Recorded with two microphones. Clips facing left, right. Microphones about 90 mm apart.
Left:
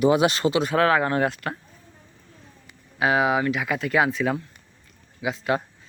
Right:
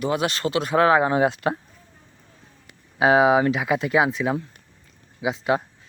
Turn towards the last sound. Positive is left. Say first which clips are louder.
# right 2 dB
turn(degrees=-20)  # may be behind; listen again after turning